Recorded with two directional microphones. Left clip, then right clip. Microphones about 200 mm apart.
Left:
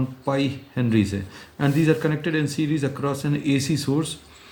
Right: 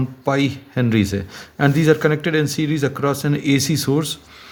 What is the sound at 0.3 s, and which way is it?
A man's voice, 50° right (ahead or behind).